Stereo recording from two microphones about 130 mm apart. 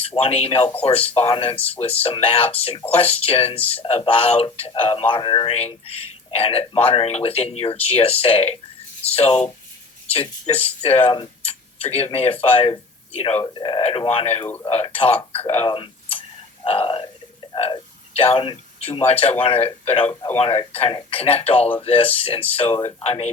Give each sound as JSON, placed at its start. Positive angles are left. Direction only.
{"t": 0.0, "sound": "speech", "side_deg": 45}
{"t": 13.5, "sound": "speech", "side_deg": 40}
{"t": 14.1, "sound": "speech", "side_deg": 50}
{"t": 14.4, "sound": "speech", "side_deg": 15}
{"t": 14.8, "sound": "speech", "side_deg": 45}